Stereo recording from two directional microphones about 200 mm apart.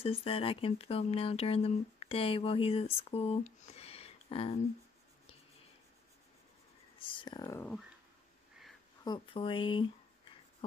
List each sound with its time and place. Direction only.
0.0 s speech: 30° left (ahead or behind)
7.0 s speech: 25° left (ahead or behind)
9.0 s speech: 25° left (ahead or behind)